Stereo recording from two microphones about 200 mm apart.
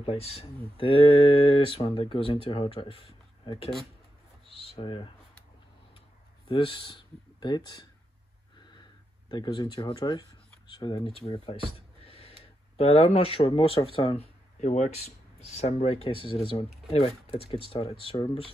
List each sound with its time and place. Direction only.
0.0 s speech: 30° left (ahead or behind)
4.5 s a sound: 25° left (ahead or behind)
6.4 s speech: 25° left (ahead or behind)
9.3 s speech: 25° left (ahead or behind)
12.0 s gasp: 30° left (ahead or behind)
12.7 s speech: 30° left (ahead or behind)
18.0 s speech: 20° left (ahead or behind)